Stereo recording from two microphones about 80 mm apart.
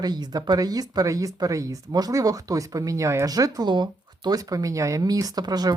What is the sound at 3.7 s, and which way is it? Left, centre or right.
Speech, right.